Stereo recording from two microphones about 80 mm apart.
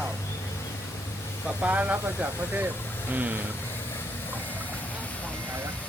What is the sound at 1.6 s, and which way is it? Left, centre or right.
Speech, centre.